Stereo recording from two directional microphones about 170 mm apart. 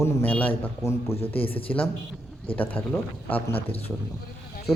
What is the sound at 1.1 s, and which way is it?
Speech, 35° left (ahead or behind).